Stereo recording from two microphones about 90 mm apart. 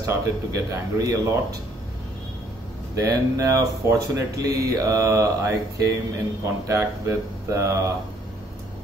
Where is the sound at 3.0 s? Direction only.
35° right (ahead or behind).